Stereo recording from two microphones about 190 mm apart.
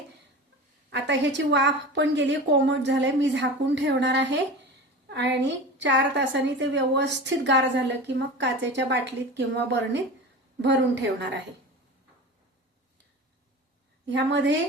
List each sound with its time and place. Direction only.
0.9 s a woman's voice: 70° right (ahead or behind)
14.1 s a woman's voice: 70° right (ahead or behind)